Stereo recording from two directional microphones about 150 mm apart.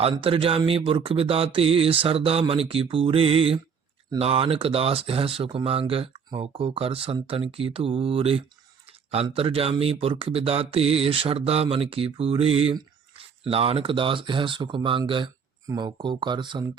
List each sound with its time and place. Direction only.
0.0 s speech: 40° right (ahead or behind)